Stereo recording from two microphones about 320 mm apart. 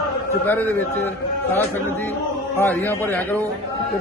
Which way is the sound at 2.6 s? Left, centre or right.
Centre.